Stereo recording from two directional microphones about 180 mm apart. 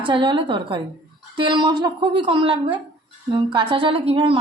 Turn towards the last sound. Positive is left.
turn(degrees=-30)  # may be behind; listen again after turning